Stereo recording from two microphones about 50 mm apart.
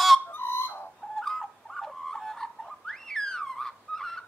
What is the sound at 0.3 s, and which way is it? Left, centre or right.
Bird, left.